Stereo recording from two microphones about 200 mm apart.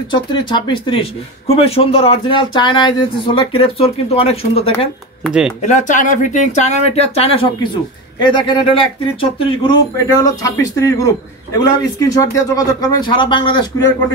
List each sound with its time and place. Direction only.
0.1 s speech: 25° left (ahead or behind)
5.2 s speech: 5° right (ahead or behind)
5.6 s speech: 40° left (ahead or behind); by 13.9 s 20° left (ahead or behind)